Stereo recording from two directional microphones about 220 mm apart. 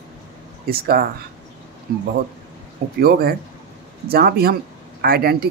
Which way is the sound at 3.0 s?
45° right (ahead or behind).